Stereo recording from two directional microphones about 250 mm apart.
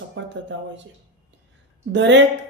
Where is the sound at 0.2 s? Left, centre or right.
Right.